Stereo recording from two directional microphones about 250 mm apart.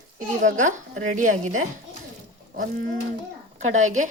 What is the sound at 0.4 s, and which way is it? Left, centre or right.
Speech, right.